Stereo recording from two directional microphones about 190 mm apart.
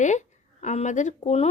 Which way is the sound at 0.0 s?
40° left (ahead or behind).